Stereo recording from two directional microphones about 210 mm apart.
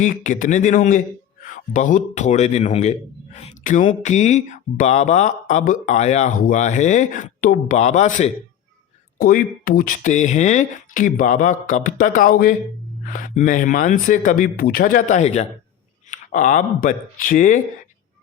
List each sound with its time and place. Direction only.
0.0 s speech: 40° left (ahead or behind)